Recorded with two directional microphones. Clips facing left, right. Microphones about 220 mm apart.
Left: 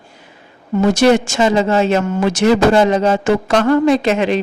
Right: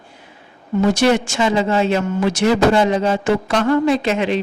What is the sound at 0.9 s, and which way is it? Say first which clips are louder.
Speech: left 4 dB; 40° left (ahead or behind).